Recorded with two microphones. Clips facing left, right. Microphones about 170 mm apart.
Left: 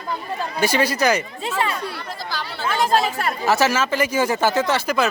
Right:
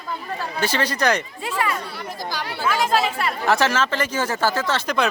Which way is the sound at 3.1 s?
45° left (ahead or behind).